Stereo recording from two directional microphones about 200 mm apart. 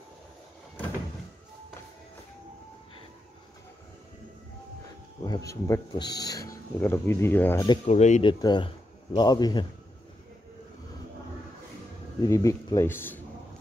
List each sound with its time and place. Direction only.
5.2 s speech: 15° left (ahead or behind)
7.6 s speech: 25° left (ahead or behind)
8.3 s a man's voice: 20° left (ahead or behind)
12.2 s speech: 15° left (ahead or behind)